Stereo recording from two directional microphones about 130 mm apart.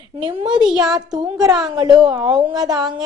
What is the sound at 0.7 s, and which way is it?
Speech, 5° right (ahead or behind).